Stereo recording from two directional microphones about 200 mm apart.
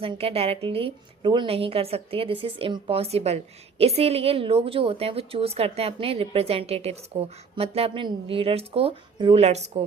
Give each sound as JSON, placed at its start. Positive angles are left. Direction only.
{"t": 0.0, "sound": "a woman's voice", "side_deg": -30}